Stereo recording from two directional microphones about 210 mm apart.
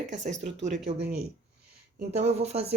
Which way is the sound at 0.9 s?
25° right (ahead or behind).